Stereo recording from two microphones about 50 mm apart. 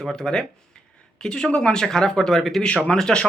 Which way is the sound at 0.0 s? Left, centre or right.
Centre.